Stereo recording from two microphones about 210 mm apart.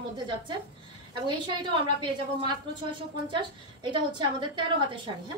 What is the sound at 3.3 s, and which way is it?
A woman's voice, 20° right (ahead or behind).